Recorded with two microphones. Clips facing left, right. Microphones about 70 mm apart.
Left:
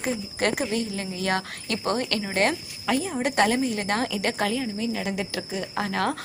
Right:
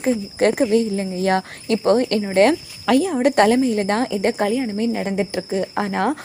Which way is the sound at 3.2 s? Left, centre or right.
Right.